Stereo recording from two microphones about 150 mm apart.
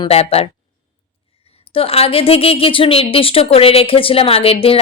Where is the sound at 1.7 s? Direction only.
40° left (ahead or behind).